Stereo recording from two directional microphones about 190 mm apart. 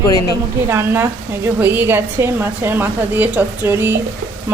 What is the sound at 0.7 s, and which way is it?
A woman's voice, 10° right (ahead or behind).